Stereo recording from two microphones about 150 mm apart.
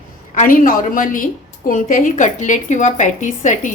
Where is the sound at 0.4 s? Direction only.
65° left (ahead or behind).